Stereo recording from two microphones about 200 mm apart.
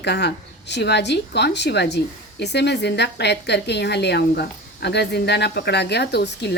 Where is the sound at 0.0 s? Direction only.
55° left (ahead or behind).